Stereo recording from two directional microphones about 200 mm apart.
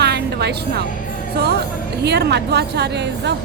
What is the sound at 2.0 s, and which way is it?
Speech, 55° right (ahead or behind).